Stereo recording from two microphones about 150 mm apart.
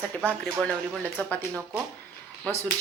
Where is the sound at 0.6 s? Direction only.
10° left (ahead or behind).